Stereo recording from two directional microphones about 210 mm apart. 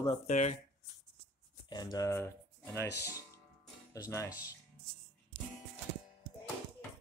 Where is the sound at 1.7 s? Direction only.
20° left (ahead or behind).